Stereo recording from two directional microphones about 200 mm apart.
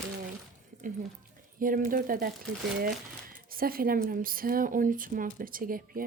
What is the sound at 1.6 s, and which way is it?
Speech, 45° right (ahead or behind).